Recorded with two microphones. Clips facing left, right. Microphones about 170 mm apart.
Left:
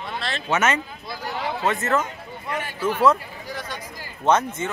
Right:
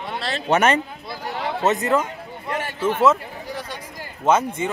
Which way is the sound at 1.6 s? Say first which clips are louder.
Right 4 dB; 15° right (ahead or behind).